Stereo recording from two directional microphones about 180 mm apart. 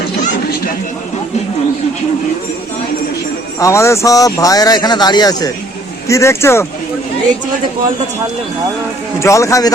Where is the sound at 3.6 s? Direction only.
15° left (ahead or behind).